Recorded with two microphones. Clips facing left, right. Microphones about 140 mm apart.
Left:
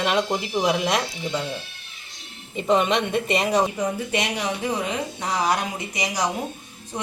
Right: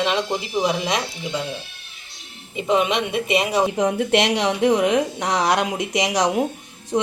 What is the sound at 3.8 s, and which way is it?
A woman's voice, 80° right.